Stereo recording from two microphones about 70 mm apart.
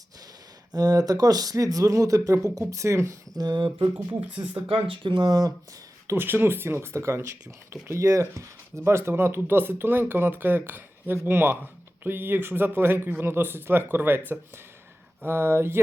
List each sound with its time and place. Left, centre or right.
0.7 s speech: right
3.3 s speech: right
5.1 s speech: right
6.1 s speech: right